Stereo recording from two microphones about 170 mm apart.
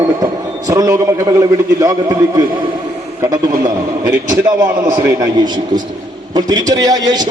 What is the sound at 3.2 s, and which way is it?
A man's voice, 20° right (ahead or behind).